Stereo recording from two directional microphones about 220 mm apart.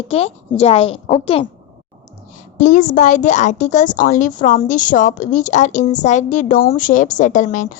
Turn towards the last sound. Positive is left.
turn(degrees=35)  # may be behind; listen again after turning